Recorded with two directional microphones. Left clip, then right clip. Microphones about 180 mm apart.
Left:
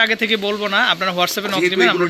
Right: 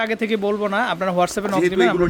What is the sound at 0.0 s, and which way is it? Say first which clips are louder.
Speech: left 4 dB; 25° right (ahead or behind).